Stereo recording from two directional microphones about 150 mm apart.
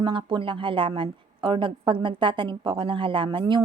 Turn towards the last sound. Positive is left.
turn(degrees=-35)  # may be behind; listen again after turning